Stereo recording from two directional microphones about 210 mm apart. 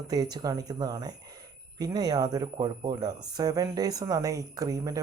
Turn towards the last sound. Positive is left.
turn(degrees=-15)  # may be behind; listen again after turning